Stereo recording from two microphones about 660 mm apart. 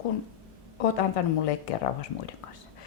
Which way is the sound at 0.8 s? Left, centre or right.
Left.